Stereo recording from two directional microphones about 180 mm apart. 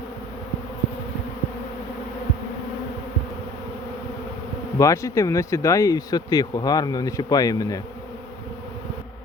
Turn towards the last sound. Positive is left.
turn(degrees=20)  # may be behind; listen again after turning